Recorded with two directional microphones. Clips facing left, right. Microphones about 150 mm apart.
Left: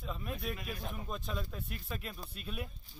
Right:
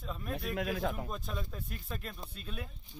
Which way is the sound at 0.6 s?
90° right.